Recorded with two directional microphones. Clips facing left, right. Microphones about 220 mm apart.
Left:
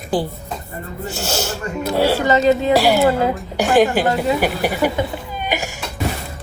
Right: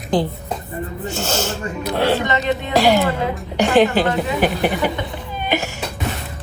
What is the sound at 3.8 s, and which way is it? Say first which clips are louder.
A woman's voice: even; 10° left (ahead or behind).